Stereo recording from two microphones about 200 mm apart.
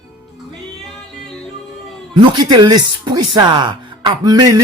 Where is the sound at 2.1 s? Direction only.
20° right (ahead or behind).